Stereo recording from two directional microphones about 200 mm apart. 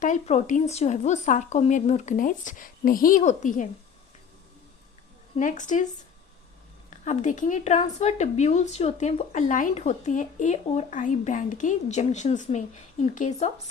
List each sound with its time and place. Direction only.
0.0 s speech: 35° left (ahead or behind)
5.4 s speech: 40° left (ahead or behind)
7.0 s speech: 35° left (ahead or behind)